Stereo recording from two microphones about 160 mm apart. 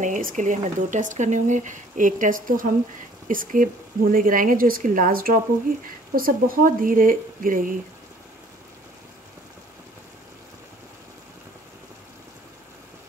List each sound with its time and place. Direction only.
0.0 s speech: 55° right (ahead or behind)